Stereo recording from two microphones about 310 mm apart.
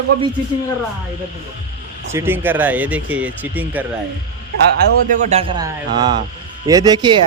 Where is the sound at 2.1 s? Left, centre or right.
Centre.